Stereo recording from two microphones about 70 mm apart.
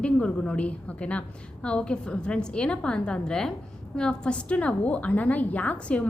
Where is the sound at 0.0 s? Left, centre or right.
Centre.